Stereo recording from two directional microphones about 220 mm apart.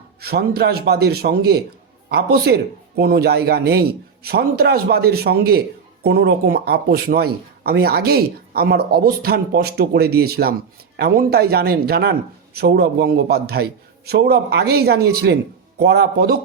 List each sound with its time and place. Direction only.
0.2 s speech: 45° right (ahead or behind)